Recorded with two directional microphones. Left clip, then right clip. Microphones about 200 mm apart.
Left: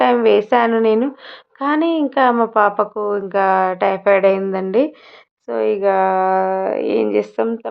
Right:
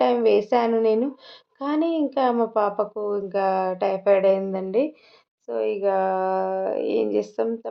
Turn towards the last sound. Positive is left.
turn(degrees=15)  # may be behind; listen again after turning